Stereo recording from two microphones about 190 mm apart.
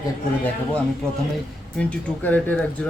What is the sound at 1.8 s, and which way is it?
Speech, 5° left (ahead or behind).